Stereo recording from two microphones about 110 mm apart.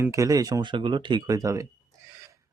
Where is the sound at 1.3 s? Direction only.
30° right (ahead or behind).